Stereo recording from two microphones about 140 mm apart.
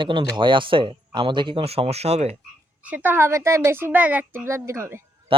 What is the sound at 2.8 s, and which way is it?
Speech, 10° right (ahead or behind).